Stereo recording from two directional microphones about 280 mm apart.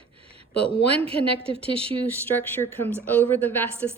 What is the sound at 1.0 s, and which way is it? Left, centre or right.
Speech, centre.